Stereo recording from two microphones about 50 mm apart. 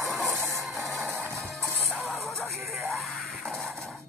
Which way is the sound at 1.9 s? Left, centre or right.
Centre.